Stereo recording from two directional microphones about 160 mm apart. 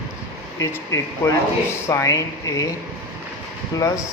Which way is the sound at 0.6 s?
20° left (ahead or behind).